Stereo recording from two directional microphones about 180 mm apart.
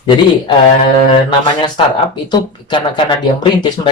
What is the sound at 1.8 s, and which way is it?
Speech, 30° left (ahead or behind).